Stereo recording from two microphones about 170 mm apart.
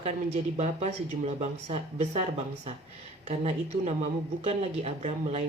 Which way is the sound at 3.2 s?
40° right (ahead or behind).